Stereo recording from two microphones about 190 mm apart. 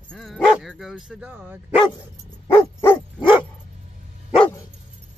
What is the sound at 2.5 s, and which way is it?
Dog, 15° left (ahead or behind).